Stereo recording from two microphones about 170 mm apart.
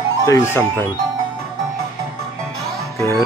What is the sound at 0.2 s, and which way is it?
Speech, 20° left (ahead or behind).